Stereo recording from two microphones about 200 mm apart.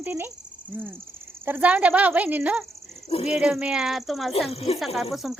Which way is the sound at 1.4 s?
10° right (ahead or behind).